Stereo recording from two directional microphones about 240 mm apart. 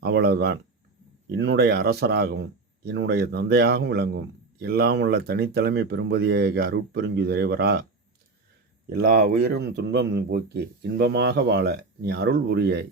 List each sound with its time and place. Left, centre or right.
0.0 s a man's voice: right
8.9 s a man's voice: right